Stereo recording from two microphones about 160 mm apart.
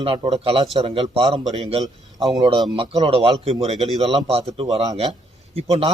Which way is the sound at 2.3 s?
25° right (ahead or behind).